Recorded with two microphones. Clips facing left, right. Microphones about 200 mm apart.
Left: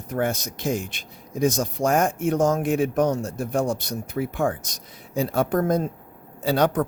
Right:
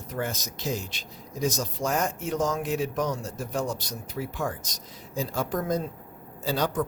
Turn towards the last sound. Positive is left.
turn(degrees=65)  # may be behind; listen again after turning